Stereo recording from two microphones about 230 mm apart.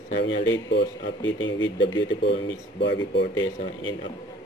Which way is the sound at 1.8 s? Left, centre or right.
Left.